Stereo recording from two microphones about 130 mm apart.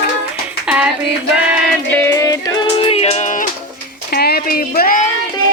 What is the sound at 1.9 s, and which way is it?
Music, 20° left (ahead or behind).